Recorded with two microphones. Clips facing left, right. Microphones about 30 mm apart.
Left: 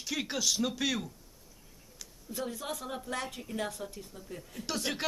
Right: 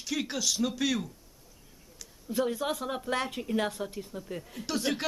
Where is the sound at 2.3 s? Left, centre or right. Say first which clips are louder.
Right 8 dB; right.